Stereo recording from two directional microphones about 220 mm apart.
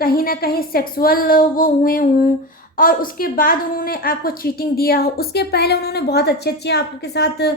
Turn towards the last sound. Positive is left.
turn(degrees=50)  # may be behind; listen again after turning